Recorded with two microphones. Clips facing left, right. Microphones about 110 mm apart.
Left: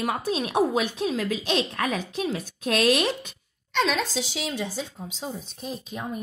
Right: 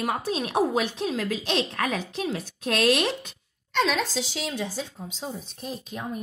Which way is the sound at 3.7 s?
Centre (ahead or behind).